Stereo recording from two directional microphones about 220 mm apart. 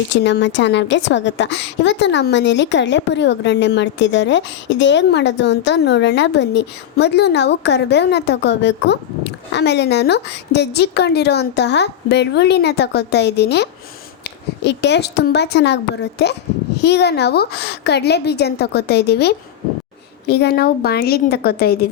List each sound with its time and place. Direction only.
0.1 s a woman's voice: 55° left (ahead or behind)